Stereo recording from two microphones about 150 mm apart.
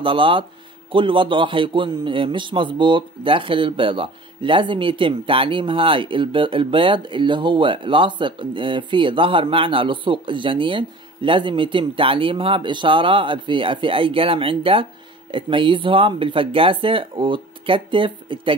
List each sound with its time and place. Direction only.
0.0 s a man's voice: 35° right (ahead or behind)